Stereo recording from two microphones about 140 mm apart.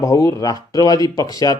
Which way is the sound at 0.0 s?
25° left (ahead or behind).